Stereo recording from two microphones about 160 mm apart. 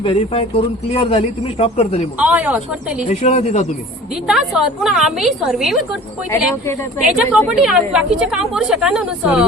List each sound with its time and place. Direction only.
0.0 s speech: 35° left (ahead or behind)
2.1 s speech: 10° right (ahead or behind)
3.1 s speech: 45° left (ahead or behind)
4.3 s a woman's voice: 5° right (ahead or behind)
7.0 s a woman's voice: 5° right (ahead or behind)